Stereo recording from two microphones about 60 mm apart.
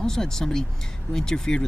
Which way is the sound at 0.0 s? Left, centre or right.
Centre.